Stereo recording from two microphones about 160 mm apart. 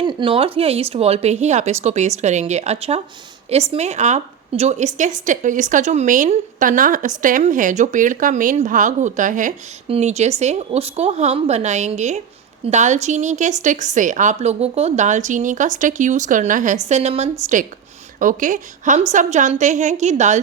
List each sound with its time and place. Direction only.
0.0 s a woman's voice: 30° right (ahead or behind); by 20.4 s 45° right (ahead or behind)